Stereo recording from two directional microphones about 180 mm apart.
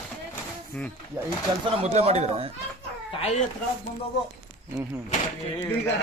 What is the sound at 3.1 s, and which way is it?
Speech, 35° left (ahead or behind).